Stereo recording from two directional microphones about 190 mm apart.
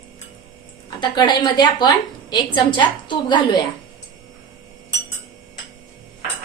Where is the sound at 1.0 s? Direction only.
25° left (ahead or behind).